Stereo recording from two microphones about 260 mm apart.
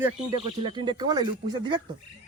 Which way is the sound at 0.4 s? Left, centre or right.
Centre.